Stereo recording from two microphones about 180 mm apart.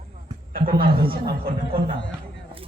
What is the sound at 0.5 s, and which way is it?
A man's voice, 55° right (ahead or behind).